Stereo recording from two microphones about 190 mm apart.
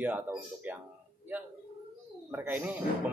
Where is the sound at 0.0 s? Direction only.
10° right (ahead or behind).